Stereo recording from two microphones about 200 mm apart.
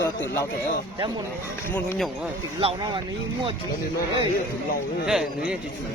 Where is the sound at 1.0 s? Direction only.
20° right (ahead or behind).